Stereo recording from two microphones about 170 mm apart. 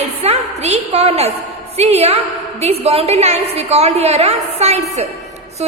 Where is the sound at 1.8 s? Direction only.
40° right (ahead or behind).